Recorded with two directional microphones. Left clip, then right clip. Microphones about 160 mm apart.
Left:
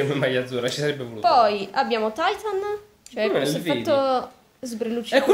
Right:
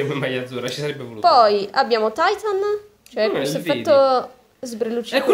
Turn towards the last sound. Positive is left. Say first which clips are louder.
# right 3 dB
turn(degrees=-25)  # may be behind; listen again after turning